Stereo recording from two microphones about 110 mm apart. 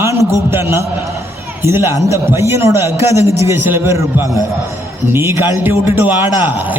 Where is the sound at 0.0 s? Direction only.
25° right (ahead or behind).